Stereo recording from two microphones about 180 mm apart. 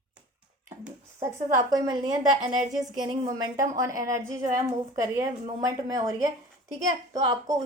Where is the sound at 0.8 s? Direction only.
15° right (ahead or behind).